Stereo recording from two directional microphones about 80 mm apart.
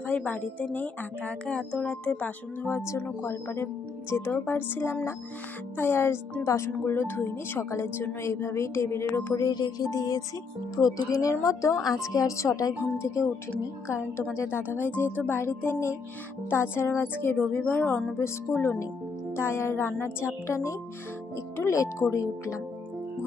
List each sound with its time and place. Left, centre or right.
0.0 s a woman's voice: left
3.2 s speech: left
9.4 s music: left
13.0 s speech: left
14.6 s speech: right
15.1 s speech: left